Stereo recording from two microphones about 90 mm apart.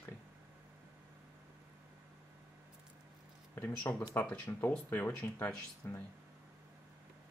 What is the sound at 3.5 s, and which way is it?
Speech, 15° left (ahead or behind).